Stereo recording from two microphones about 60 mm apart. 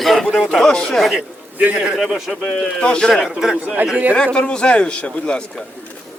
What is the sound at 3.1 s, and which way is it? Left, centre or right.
Speech, centre.